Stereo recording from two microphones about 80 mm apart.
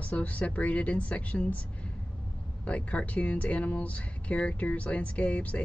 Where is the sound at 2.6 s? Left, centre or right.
Centre.